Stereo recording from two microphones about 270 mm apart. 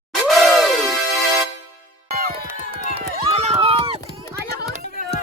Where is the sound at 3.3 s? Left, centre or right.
Right.